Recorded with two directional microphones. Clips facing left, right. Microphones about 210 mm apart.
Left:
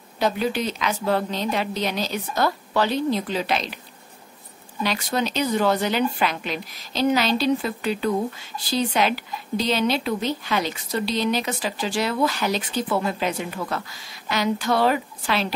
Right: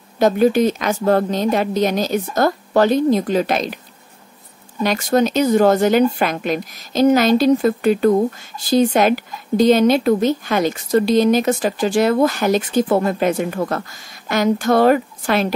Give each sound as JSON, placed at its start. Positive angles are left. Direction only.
{"t": 0.2, "sound": "a woman's voice", "side_deg": -45}
{"t": 4.8, "sound": "a woman's voice", "side_deg": -45}